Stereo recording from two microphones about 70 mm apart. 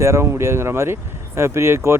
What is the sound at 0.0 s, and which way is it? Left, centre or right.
Speech, right.